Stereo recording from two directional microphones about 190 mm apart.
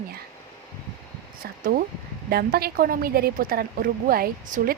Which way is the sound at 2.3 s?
55° right (ahead or behind).